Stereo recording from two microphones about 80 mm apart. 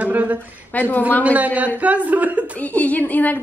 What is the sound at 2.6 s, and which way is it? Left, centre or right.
Speech, centre.